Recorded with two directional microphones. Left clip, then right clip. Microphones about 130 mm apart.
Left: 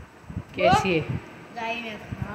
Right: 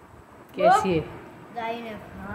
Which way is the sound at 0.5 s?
5° right (ahead or behind).